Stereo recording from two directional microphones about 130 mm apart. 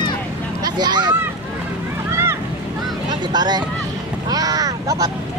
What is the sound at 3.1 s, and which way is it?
Speech, 35° right (ahead or behind).